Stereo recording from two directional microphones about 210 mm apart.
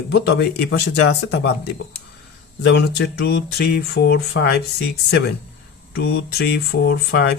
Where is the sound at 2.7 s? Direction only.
55° left (ahead or behind).